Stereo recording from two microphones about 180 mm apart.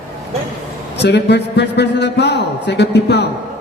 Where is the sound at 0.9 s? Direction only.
70° left (ahead or behind).